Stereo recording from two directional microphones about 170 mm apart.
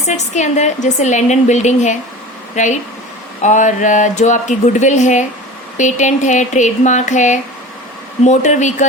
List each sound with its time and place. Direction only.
0.1 s a woman's voice: 45° left (ahead or behind)